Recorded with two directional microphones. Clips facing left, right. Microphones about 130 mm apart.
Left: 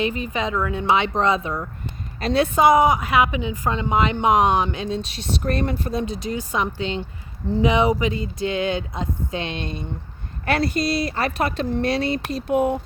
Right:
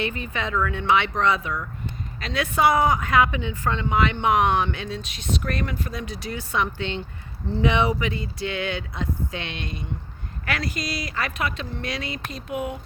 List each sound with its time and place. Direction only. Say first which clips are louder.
0.0 s a woman's voice: left 4 dB; 20° left (ahead or behind)
2.6 s a woman's voice: left 3 dB; 15° left (ahead or behind); by 12.8 s 40° left (ahead or behind)